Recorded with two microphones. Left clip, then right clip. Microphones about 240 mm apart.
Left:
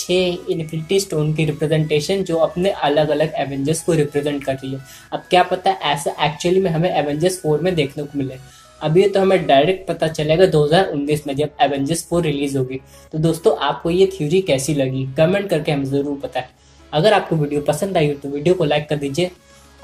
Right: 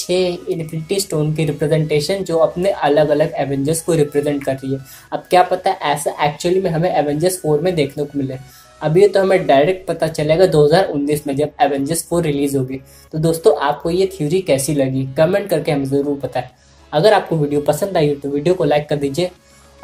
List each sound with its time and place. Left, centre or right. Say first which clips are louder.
0.0 s speech: right 1 dB; centre